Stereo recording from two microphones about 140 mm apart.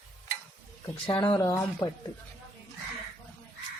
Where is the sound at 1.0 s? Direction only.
35° left (ahead or behind).